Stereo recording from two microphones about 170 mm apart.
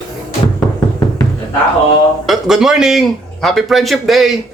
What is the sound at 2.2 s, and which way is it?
A man's voice, centre (ahead or behind).